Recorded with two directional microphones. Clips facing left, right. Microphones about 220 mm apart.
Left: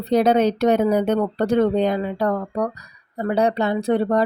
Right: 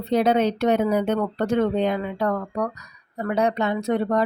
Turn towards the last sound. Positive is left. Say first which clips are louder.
# left 3 dB
turn(degrees=35)  # may be behind; listen again after turning